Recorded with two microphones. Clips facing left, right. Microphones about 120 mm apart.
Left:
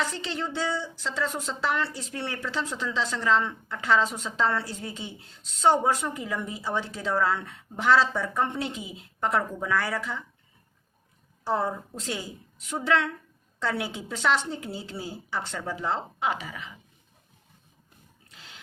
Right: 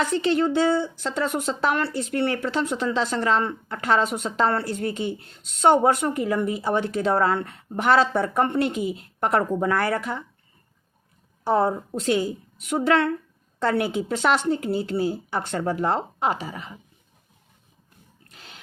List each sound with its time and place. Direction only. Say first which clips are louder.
0.0 s a woman's voice: right 10 dB; 55° right (ahead or behind)
11.4 s a woman's voice: right 6 dB; 60° right (ahead or behind)
16.2 s a woman's voice: right 4 dB; 35° right (ahead or behind)
18.3 s pig: right 3 dB; 55° right (ahead or behind)